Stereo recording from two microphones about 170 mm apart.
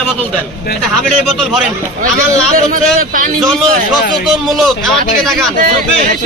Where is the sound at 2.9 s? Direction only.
50° right (ahead or behind).